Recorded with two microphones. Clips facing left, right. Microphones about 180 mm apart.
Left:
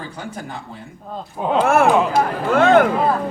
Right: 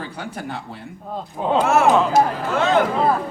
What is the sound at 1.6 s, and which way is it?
Speech, 55° left (ahead or behind).